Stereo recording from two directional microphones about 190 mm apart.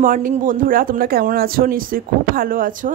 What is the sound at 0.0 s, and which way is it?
A woman's voice, 45° right (ahead or behind).